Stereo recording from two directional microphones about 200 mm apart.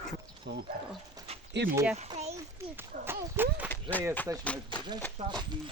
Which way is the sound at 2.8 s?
10° right (ahead or behind).